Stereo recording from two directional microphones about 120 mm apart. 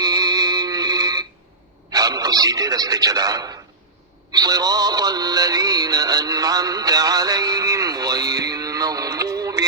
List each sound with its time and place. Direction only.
0.0 s music: 30° right (ahead or behind)
1.9 s a man's voice: 30° right (ahead or behind)
4.3 s music: 35° right (ahead or behind)